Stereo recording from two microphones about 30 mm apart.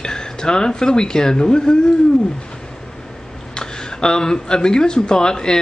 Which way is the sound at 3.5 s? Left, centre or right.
Left.